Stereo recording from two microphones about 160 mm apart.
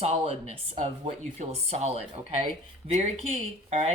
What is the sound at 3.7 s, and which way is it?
Speech, 40° right (ahead or behind).